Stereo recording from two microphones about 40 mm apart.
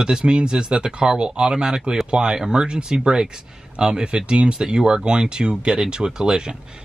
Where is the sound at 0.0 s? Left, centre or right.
Right.